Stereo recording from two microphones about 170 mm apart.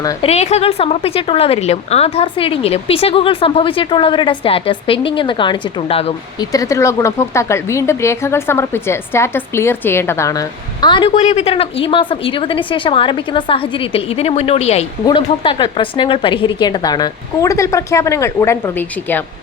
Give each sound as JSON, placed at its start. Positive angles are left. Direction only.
{"t": 0.2, "sound": "speech", "side_deg": 40}
{"t": 6.4, "sound": "speech", "side_deg": 20}
{"t": 11.2, "sound": "speech", "side_deg": 40}
{"t": 15.0, "sound": "speech", "side_deg": 30}